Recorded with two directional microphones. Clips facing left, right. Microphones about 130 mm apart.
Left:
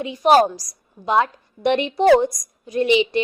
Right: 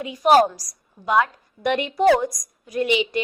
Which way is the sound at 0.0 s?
25° left (ahead or behind).